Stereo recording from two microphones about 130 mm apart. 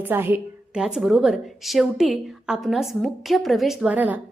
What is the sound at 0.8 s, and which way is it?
A woman's voice, 5° right (ahead or behind).